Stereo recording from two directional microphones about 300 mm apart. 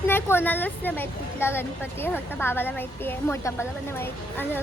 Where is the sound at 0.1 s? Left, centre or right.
Centre.